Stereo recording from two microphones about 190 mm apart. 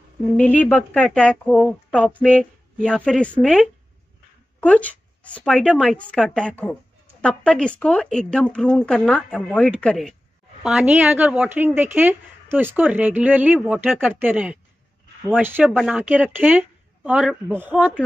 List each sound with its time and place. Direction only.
0.4 s a woman's voice: 10° left (ahead or behind); by 18.0 s 10° right (ahead or behind)